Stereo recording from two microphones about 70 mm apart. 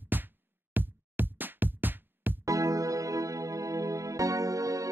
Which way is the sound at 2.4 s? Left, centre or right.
Right.